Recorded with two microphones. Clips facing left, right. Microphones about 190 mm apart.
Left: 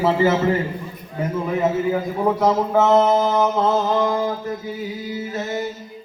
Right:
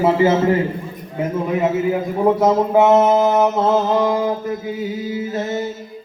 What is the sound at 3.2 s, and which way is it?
Mantra, 20° right (ahead or behind).